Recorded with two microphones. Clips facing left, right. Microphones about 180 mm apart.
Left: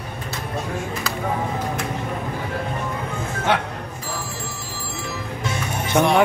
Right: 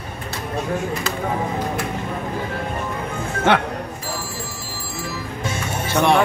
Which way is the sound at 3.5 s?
65° right (ahead or behind).